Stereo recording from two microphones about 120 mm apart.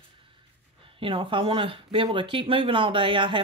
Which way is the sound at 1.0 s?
45° right (ahead or behind).